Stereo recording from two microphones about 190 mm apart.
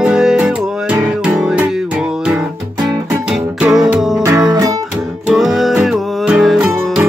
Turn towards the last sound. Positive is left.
turn(degrees=0)  # may be behind; listen again after turning